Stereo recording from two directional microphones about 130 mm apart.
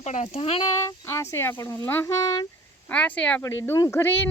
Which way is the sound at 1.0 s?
20° left (ahead or behind).